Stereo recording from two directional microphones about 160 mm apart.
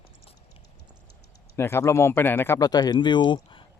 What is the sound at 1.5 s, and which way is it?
Speech, 15° left (ahead or behind).